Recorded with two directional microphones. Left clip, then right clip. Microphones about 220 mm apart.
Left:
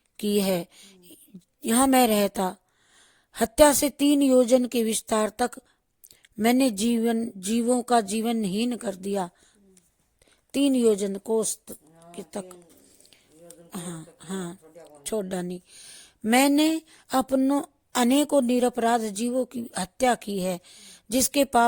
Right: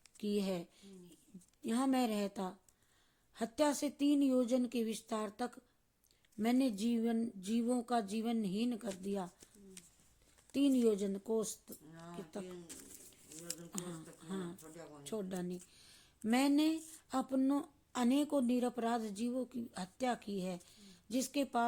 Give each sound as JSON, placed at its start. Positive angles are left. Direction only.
{"t": 0.2, "sound": "a woman's voice", "side_deg": 50}
{"t": 10.5, "sound": "a woman's voice", "side_deg": 45}
{"t": 13.7, "sound": "a woman's voice", "side_deg": 45}